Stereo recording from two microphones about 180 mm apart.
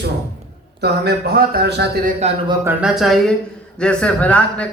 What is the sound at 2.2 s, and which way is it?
Speech, 35° right (ahead or behind).